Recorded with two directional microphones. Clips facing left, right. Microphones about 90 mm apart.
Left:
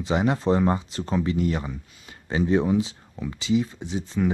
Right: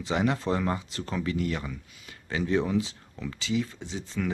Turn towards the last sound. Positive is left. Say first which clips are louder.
# left 7 dB
turn(degrees=20)  # may be behind; listen again after turning